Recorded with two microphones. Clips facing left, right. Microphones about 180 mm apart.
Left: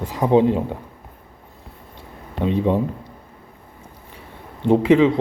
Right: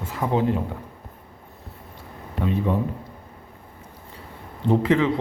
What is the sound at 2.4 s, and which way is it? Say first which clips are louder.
Speech: left 4 dB; 20° left (ahead or behind).